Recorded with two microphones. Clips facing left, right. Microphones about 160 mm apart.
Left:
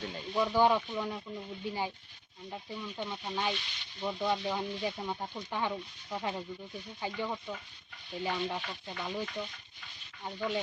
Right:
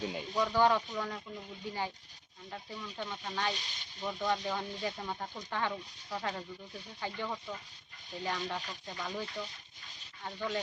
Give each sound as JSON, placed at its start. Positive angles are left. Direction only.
{"t": 0.3, "sound": "speech", "side_deg": 15}
{"t": 3.5, "sound": "speech", "side_deg": -40}
{"t": 4.0, "sound": "speech", "side_deg": 15}
{"t": 10.2, "sound": "speech", "side_deg": 15}